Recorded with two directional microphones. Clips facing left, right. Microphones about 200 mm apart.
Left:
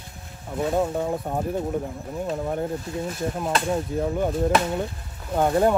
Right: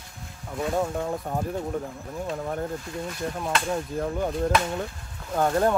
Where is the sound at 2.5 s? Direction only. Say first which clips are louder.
Left 3 dB; 25° left (ahead or behind).